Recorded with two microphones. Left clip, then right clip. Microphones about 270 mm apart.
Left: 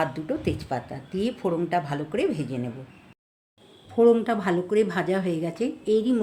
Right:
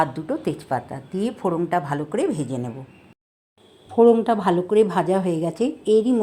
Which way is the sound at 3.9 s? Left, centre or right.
Centre.